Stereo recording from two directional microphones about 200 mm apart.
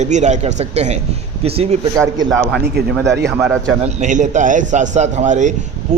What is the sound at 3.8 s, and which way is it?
A man's voice, 35° right (ahead or behind).